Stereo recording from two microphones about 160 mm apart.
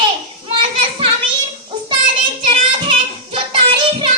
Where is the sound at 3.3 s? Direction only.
30° right (ahead or behind).